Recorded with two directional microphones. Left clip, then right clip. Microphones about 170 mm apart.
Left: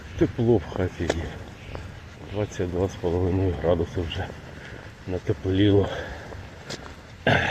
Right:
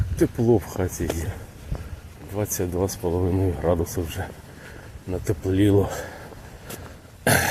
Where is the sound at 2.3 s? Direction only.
25° right (ahead or behind).